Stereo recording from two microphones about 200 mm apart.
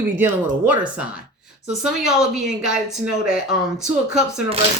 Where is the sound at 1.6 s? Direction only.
5° right (ahead or behind).